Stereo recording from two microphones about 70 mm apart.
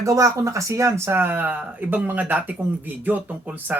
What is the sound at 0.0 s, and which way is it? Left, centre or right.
Speech, right.